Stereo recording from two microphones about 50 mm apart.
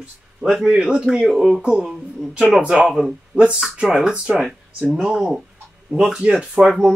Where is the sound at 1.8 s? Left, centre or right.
Centre.